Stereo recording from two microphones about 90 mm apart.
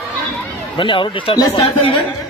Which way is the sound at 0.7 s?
70° left (ahead or behind).